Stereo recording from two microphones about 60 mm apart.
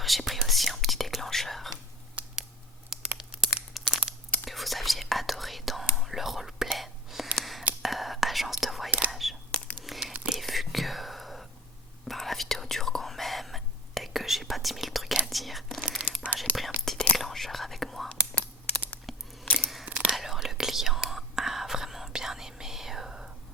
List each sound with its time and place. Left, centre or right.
0.0 s whispering: centre
2.2 s scissors: right
2.9 s crumpling: centre
4.4 s whispering: centre
18.1 s whispering: left
19.1 s a sound: centre
19.5 s scissors: centre
19.8 s whispering: centre
20.1 s whispering: centre